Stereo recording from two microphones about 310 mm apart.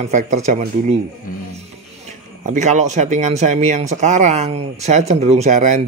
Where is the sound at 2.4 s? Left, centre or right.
Right.